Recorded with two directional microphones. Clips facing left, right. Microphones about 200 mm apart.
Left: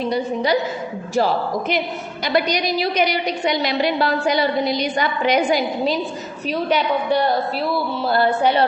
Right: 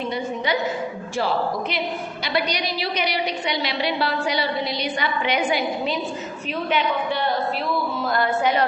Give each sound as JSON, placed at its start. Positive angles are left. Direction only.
{"t": 0.1, "sound": "a woman's voice", "side_deg": 40}
{"t": 2.2, "sound": "a woman's voice", "side_deg": 45}